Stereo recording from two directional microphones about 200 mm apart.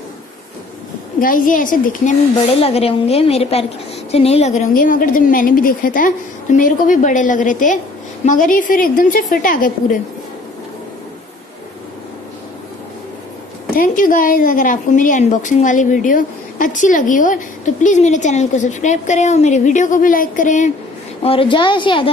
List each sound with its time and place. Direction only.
1.2 s a woman's voice: 40° left (ahead or behind)
2.6 s a woman's voice: 30° left (ahead or behind)
13.7 s a woman's voice: 45° left (ahead or behind)
21.2 s a woman's voice: 30° left (ahead or behind)